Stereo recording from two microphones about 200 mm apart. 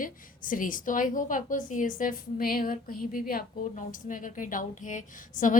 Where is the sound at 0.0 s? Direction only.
45° left (ahead or behind).